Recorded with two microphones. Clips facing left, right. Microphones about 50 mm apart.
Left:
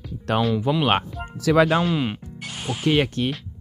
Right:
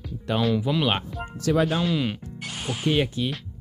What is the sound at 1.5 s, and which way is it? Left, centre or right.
Speech, left.